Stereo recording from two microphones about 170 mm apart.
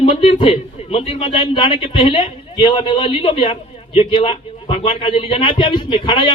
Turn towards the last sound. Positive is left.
turn(degrees=30)  # may be behind; listen again after turning